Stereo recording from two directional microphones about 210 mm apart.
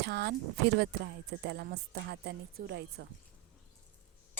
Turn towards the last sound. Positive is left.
turn(degrees=-50)  # may be behind; listen again after turning